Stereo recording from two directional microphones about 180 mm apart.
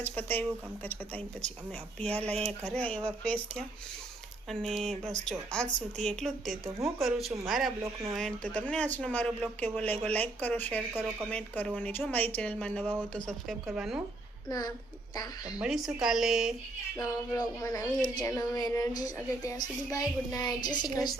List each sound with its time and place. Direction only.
0.0 s speech: 10° left (ahead or behind)
2.2 s speech: 5° left (ahead or behind)
15.1 s a woman's voice: 20° left (ahead or behind)
15.5 s speech: 5° right (ahead or behind)
17.0 s a woman's voice: 20° left (ahead or behind)